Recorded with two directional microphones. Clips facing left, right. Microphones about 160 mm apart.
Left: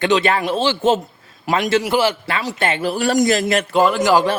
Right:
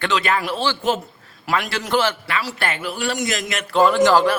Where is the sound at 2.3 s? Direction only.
20° left (ahead or behind).